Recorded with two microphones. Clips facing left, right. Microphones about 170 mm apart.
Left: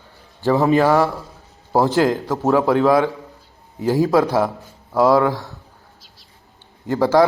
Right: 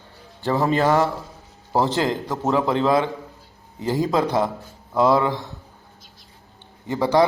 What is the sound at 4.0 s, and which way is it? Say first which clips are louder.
A man's voice: left 4 dB; 10° left (ahead or behind).